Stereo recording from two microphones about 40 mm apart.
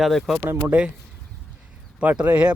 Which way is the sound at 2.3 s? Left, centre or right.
Right.